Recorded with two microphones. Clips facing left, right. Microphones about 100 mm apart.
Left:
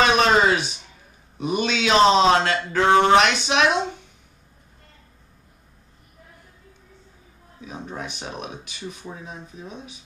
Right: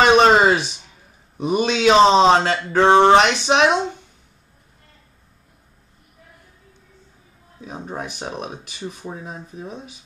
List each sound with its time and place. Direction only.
0.0 s a sound: 35° right (ahead or behind)
1.4 s speech: 30° right (ahead or behind)
7.6 s speech: 35° right (ahead or behind)